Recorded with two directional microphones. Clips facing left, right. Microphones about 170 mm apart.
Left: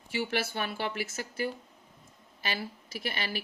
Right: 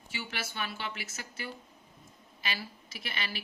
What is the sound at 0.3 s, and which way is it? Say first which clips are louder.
Speech: left 6 dB; 50° left (ahead or behind).